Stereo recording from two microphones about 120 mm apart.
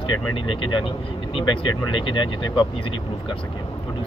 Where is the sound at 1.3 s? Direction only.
45° left (ahead or behind).